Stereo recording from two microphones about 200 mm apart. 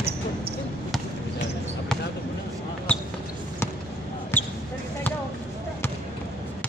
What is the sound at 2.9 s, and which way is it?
Basketball bounce, 5° left (ahead or behind).